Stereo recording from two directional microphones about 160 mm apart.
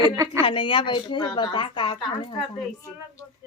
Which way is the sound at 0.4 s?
35° left (ahead or behind).